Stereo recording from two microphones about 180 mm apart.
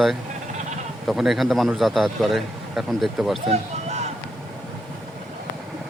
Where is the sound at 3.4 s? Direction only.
35° right (ahead or behind).